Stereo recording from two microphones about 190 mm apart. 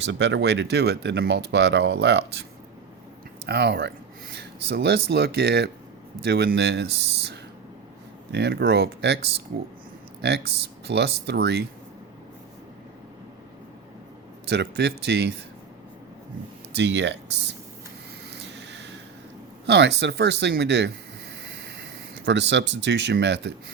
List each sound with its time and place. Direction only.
0.0 s speech: 70° right (ahead or behind)
3.4 s speech: 60° right (ahead or behind)
14.4 s speech: 60° right (ahead or behind)
16.7 s speech: 65° right (ahead or behind)
18.5 s a sound: 65° right (ahead or behind)
19.6 s speech: 65° right (ahead or behind)